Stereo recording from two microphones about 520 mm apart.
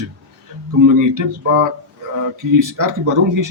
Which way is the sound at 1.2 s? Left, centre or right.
Right.